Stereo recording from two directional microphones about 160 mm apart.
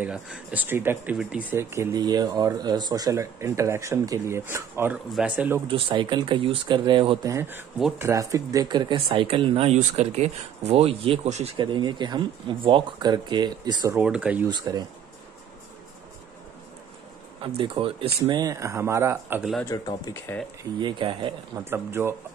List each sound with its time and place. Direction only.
0.0 s speech: 5° right (ahead or behind)
5.7 s speech: 30° right (ahead or behind)
7.2 s speech: 15° right (ahead or behind); by 11.5 s 40° right (ahead or behind)
11.5 s speech: 30° right (ahead or behind)
14.0 s speech: 5° right (ahead or behind)
14.5 s speech: 25° right (ahead or behind)
17.6 s speech: 35° right (ahead or behind); by 19.4 s 15° right (ahead or behind)
19.7 s speech: 25° left (ahead or behind)
20.8 s speech: 30° right (ahead or behind)
21.5 s speech: 15° right (ahead or behind)